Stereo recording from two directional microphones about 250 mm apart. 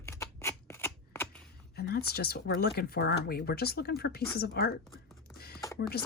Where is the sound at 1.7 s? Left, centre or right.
Left.